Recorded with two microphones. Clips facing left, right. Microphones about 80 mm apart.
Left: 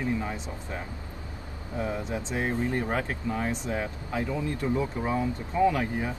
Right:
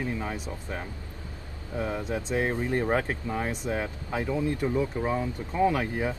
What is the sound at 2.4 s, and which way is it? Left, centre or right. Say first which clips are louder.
Speech: right 1 dB; right.